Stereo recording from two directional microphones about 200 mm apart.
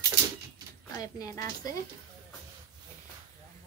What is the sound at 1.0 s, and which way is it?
Speech, 15° left (ahead or behind).